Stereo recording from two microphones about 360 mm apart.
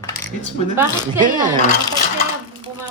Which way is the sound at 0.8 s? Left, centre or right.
Centre.